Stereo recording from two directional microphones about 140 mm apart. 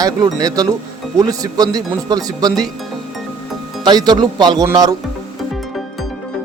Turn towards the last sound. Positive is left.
turn(degrees=-30)  # may be behind; listen again after turning